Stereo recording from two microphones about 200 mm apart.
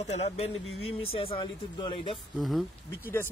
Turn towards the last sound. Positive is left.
turn(degrees=0)  # may be behind; listen again after turning